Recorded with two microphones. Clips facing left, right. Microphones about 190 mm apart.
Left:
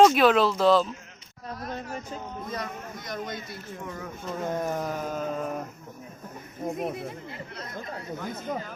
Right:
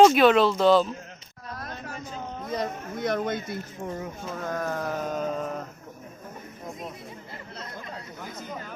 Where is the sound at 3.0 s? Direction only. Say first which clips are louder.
Right 10 dB; 55° right (ahead or behind).